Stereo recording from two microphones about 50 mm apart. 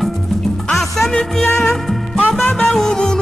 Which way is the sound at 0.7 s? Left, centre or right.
Centre.